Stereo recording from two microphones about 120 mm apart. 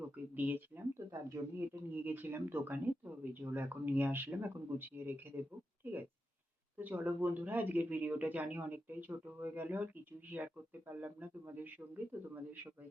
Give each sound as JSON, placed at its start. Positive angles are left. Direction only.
{"t": 0.3, "sound": "speech", "side_deg": -15}